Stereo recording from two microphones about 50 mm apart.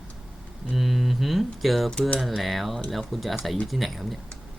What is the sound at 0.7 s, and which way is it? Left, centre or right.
Speech, centre.